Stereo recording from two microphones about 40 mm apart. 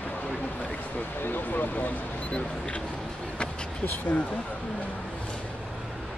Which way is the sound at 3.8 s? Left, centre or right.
Left.